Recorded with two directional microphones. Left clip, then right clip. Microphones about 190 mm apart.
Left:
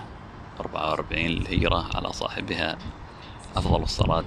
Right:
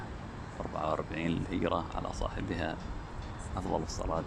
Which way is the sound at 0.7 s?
5° left (ahead or behind).